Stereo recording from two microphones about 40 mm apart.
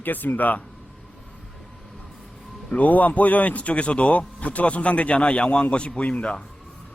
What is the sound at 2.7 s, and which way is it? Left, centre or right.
A man's voice, left.